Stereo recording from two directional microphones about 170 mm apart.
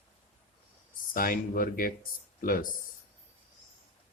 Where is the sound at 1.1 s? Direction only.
55° left (ahead or behind).